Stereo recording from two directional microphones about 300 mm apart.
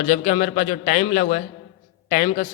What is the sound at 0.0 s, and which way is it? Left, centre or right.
A man's voice, left.